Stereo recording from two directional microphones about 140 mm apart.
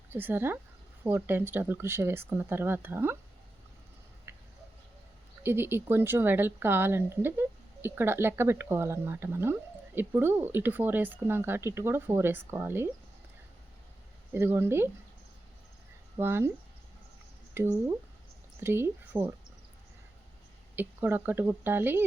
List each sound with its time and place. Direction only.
0.1 s speech: 15° right (ahead or behind)
4.3 s a sound: 15° right (ahead or behind)
5.4 s speech: 15° right (ahead or behind)
14.3 s speech: 20° right (ahead or behind)
16.1 s speech: 15° right (ahead or behind)
17.5 s speech: 20° right (ahead or behind)
20.7 s speech: 15° right (ahead or behind)